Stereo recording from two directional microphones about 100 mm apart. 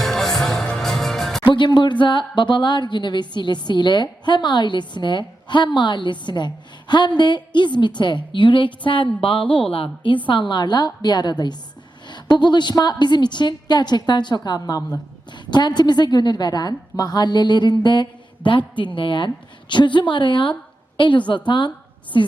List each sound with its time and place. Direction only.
0.0 s music: 5° left (ahead or behind)
1.5 s a woman's voice: 50° left (ahead or behind)